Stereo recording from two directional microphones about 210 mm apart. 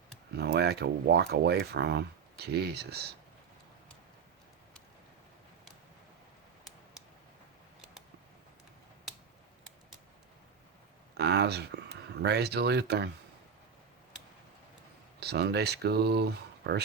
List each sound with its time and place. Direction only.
0.3 s speech: 50° right (ahead or behind)
11.2 s speech: 50° right (ahead or behind)
15.2 s speech: 50° right (ahead or behind)